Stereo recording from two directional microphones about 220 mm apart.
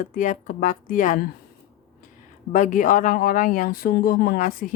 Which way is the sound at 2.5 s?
35° left (ahead or behind).